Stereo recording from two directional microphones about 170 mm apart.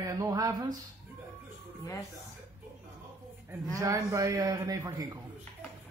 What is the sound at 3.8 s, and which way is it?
Speech, 20° right (ahead or behind).